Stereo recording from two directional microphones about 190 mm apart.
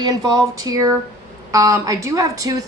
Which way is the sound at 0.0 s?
20° right (ahead or behind).